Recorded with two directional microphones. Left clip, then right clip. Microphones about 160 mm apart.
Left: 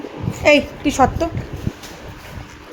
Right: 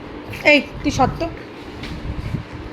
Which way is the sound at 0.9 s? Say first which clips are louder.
Left 3 dB; 25° left (ahead or behind).